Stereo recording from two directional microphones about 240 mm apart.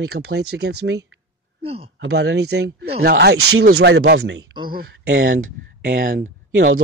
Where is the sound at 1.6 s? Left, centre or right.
Right.